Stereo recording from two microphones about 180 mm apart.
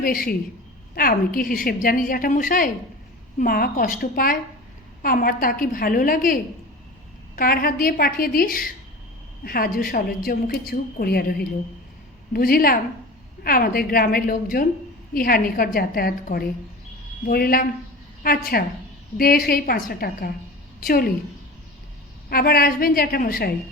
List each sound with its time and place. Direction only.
0.0 s a woman's voice: 50° left (ahead or behind)
22.3 s a woman's voice: 55° left (ahead or behind)